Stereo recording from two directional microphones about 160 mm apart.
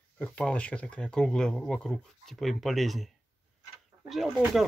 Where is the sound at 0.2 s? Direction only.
5° left (ahead or behind).